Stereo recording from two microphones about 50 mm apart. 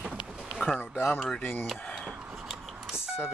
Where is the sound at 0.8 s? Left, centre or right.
Left.